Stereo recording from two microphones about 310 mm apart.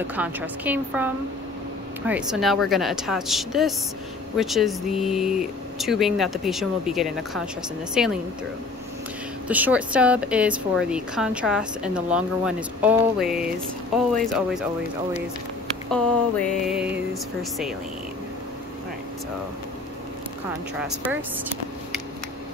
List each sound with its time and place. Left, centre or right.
0.0 s a woman's voice: centre
9.5 s a woman's voice: centre
15.9 s a woman's voice: centre
20.8 s a woman's voice: centre